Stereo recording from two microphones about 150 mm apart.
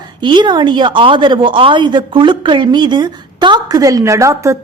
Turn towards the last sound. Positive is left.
turn(degrees=-20)  # may be behind; listen again after turning